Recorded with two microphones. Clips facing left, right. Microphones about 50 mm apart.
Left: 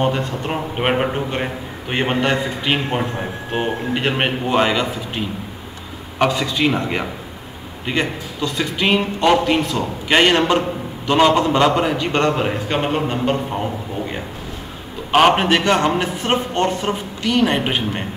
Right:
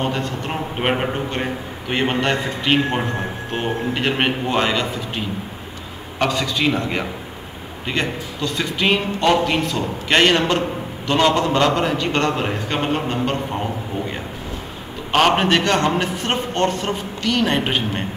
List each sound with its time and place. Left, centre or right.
0.0 s a man's voice: centre
0.5 s a man's voice: centre
7.9 s a man's voice: centre
15.0 s a man's voice: centre